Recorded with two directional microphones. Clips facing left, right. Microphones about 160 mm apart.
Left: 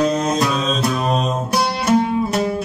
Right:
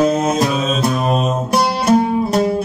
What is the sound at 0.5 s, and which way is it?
Mantra, 5° right (ahead or behind).